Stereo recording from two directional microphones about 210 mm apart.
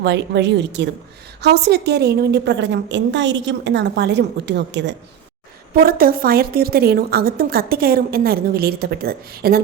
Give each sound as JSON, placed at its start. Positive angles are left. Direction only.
{"t": 0.0, "sound": "a woman's voice", "side_deg": -55}
{"t": 5.7, "sound": "a woman's voice", "side_deg": -45}